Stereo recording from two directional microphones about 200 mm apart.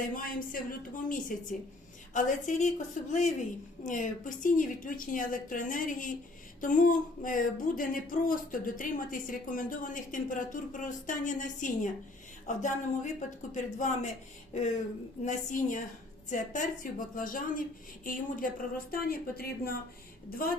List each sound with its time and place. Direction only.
0.2 s a woman's voice: 45° left (ahead or behind)
15.2 s a woman's voice: 40° left (ahead or behind)